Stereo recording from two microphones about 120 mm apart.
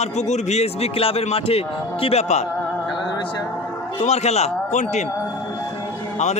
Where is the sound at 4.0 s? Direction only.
65° left (ahead or behind); by 5.0 s 80° left.